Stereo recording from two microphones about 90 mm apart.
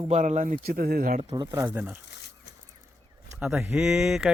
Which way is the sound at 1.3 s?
55° right (ahead or behind).